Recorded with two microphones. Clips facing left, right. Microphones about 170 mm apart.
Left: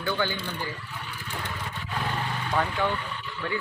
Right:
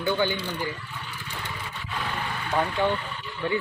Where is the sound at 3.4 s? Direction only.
20° right (ahead or behind).